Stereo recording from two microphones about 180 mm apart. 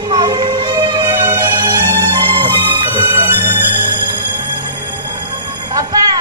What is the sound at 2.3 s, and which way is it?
Music, 25° right (ahead or behind).